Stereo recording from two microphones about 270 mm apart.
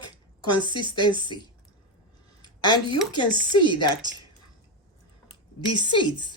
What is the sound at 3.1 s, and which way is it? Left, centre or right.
Speech, centre.